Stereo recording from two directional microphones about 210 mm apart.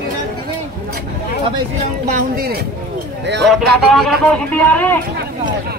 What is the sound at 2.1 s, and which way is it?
Speech, 45° right (ahead or behind).